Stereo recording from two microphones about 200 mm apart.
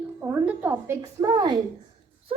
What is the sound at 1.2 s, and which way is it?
Speech, 20° right (ahead or behind).